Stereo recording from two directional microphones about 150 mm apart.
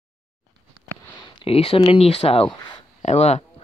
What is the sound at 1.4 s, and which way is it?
Speech, 40° left (ahead or behind).